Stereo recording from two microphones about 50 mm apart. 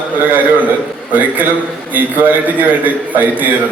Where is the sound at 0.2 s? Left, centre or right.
Right.